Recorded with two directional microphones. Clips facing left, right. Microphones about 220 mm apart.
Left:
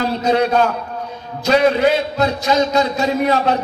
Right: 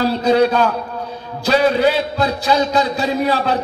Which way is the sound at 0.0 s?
35° right (ahead or behind).